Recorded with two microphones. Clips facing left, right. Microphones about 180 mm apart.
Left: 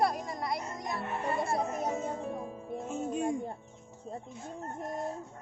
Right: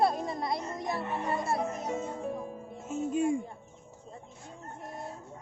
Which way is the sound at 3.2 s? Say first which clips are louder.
Right 4 dB; 45° left (ahead or behind).